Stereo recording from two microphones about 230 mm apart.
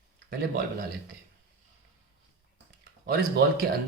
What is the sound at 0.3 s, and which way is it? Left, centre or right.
Speech, right.